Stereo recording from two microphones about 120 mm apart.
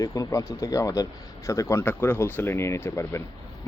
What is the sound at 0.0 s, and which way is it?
Speech, 25° left (ahead or behind).